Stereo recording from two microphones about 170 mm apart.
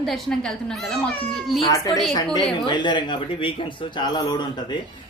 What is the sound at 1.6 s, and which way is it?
Speech, 20° left (ahead or behind).